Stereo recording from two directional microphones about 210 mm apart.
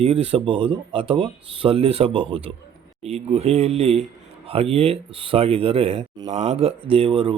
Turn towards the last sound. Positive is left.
turn(degrees=-25)  # may be behind; listen again after turning